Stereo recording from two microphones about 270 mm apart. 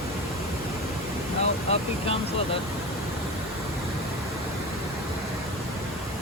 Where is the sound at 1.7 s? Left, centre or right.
Left.